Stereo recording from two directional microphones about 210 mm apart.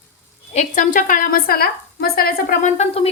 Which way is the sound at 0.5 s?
40° left (ahead or behind).